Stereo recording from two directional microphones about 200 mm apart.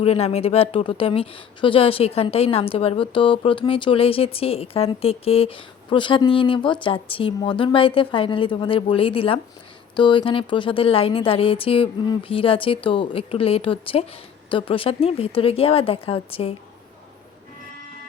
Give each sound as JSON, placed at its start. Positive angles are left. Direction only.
{"t": 0.0, "sound": "speech", "side_deg": 30}